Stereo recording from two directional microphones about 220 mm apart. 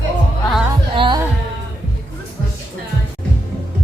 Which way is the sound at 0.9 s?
25° right (ahead or behind).